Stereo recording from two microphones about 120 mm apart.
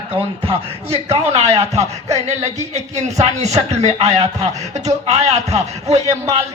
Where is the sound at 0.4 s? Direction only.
55° right (ahead or behind).